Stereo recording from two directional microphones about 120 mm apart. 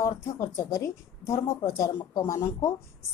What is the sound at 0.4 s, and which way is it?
A woman's voice, 25° left (ahead or behind).